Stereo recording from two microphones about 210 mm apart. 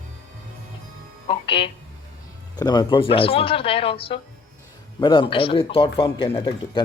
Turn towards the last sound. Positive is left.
turn(degrees=25)  # may be behind; listen again after turning